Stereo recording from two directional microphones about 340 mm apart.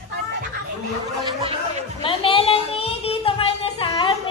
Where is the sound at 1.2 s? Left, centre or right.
Centre.